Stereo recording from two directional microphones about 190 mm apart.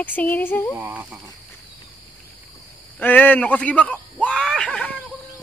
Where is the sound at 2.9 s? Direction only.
10° left (ahead or behind).